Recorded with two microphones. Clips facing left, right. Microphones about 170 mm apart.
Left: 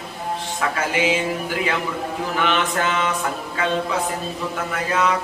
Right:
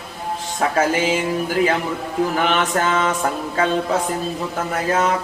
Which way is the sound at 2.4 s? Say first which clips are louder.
Left 2 dB; 45° right (ahead or behind).